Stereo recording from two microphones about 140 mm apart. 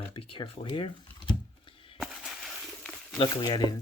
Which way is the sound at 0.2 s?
40° left (ahead or behind).